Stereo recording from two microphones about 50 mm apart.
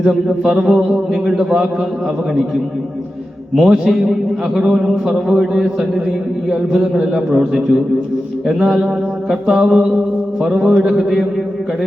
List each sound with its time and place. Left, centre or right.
0.1 s a man's voice: centre
0.8 s mantra: right
1.1 s a man's voice: centre
3.5 s a man's voice: centre
9.7 s mantra: centre
10.4 s a man's voice: centre